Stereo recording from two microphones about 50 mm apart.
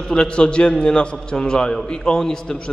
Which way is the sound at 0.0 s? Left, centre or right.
Centre.